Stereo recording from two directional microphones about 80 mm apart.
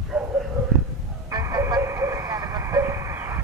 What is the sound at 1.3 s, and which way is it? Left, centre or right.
Music, right.